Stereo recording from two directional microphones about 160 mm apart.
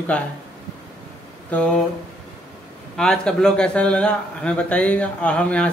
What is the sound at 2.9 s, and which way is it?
A man's voice, 5° left (ahead or behind).